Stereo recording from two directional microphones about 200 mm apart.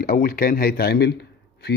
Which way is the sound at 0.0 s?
45° left (ahead or behind).